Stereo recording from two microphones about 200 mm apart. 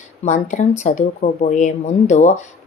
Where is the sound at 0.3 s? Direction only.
35° left (ahead or behind).